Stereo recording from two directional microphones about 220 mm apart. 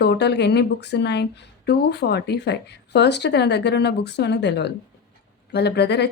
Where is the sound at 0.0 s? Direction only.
50° left (ahead or behind).